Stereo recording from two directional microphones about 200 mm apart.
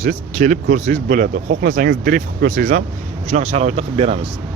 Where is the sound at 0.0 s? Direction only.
40° right (ahead or behind).